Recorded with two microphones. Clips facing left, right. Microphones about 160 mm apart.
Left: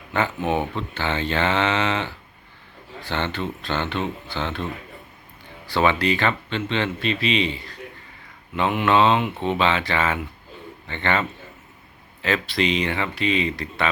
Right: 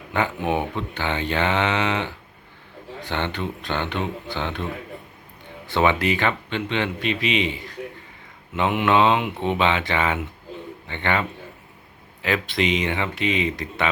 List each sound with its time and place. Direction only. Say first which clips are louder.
0.1 s speech: even; 15° right (ahead or behind)